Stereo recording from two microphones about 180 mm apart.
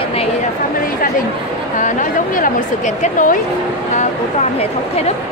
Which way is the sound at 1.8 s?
45° left (ahead or behind).